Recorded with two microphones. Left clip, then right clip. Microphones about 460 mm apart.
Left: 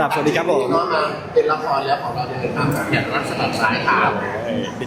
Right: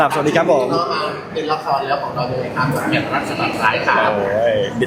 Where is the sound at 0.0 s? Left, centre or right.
Centre.